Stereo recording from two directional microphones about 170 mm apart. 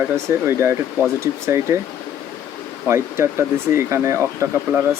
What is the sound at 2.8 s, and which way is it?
Speech, 15° right (ahead or behind).